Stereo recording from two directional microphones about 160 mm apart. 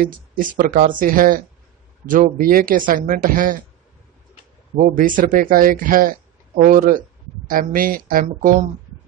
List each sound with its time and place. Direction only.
0.0 s speech: 60° right (ahead or behind)
4.7 s speech: 55° right (ahead or behind)